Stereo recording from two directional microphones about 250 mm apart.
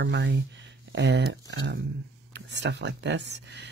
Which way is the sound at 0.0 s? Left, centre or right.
Right.